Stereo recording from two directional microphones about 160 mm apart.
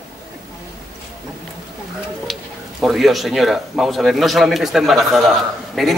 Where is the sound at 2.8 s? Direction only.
Centre (ahead or behind).